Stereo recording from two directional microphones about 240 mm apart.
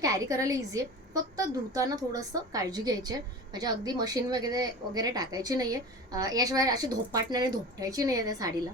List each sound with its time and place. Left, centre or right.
0.0 s a woman's voice: centre